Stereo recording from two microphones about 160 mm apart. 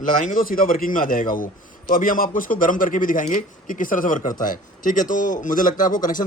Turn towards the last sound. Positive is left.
turn(degrees=55)  # may be behind; listen again after turning